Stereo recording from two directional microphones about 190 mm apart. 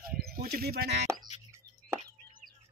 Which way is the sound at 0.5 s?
50° right (ahead or behind).